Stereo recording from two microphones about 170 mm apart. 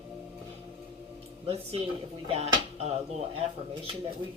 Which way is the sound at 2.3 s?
40° right (ahead or behind).